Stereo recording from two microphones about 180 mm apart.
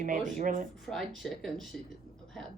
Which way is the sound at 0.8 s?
Centre (ahead or behind).